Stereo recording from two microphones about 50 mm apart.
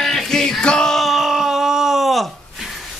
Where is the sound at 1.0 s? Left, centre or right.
Centre.